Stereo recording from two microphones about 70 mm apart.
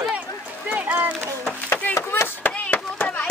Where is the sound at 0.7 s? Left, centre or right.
Right.